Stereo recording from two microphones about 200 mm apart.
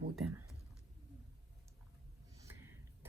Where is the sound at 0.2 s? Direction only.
5° right (ahead or behind).